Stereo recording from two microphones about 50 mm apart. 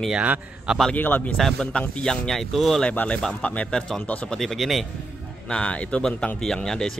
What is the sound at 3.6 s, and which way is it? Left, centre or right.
Speech, centre.